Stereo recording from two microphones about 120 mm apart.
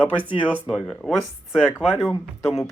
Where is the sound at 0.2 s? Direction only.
10° right (ahead or behind).